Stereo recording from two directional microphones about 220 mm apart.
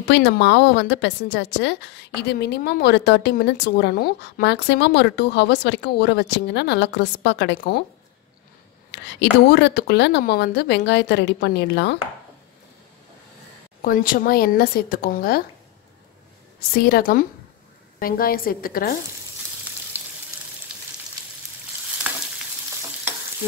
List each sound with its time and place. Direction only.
0.1 s a woman's voice: 50° left (ahead or behind)
8.9 s a woman's voice: 50° left (ahead or behind)
13.8 s speech: 40° left (ahead or behind)
16.7 s a woman's voice: 45° left (ahead or behind)
22.0 s frying: 5° right (ahead or behind)